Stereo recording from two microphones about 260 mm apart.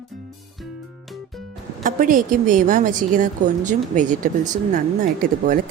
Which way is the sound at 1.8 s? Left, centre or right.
Right.